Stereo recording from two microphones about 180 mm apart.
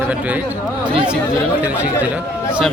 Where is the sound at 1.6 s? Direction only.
10° right (ahead or behind).